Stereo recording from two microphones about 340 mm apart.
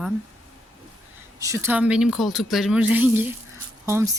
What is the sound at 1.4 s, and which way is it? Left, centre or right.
Speech, centre.